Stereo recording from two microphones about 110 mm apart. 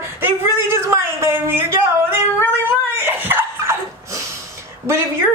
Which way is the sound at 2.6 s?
20° right (ahead or behind).